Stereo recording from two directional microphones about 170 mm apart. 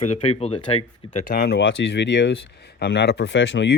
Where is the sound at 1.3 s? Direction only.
70° left (ahead or behind).